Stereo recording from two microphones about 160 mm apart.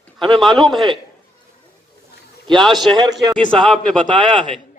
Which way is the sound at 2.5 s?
Centre (ahead or behind).